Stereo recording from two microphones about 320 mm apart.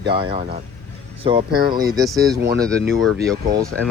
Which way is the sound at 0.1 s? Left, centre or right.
Centre.